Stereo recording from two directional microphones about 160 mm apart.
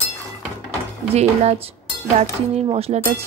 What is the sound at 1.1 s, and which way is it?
A woman's voice, 40° right (ahead or behind).